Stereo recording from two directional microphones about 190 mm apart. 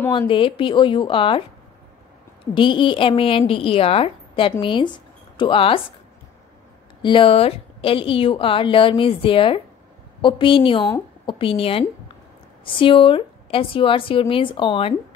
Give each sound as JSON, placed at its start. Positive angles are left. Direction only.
{"t": 0.3, "sound": "a woman's voice", "side_deg": 25}
{"t": 2.5, "sound": "a woman's voice", "side_deg": 25}
{"t": 7.0, "sound": "a woman's voice", "side_deg": 25}